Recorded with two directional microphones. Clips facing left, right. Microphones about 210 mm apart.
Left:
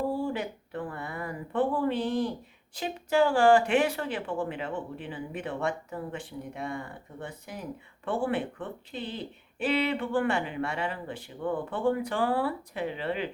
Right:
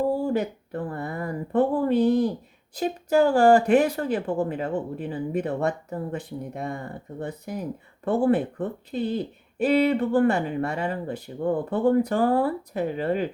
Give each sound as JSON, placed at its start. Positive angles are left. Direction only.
{"t": 0.2, "sound": "speech", "side_deg": -40}